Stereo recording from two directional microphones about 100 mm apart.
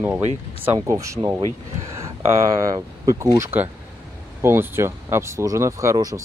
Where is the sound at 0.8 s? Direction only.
30° right (ahead or behind).